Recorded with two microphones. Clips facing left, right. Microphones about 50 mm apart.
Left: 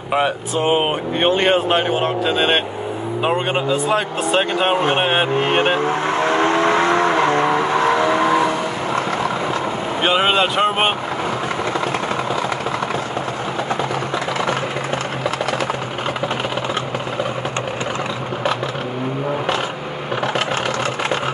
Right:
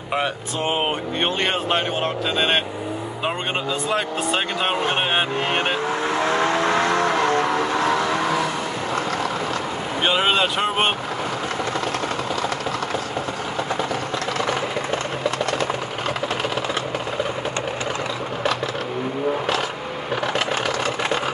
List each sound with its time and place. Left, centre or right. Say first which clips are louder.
0.1 s speech: left 5 dB; centre
6.0 s vehicle: left 2 dB; left
10.0 s speech: left 3 dB; centre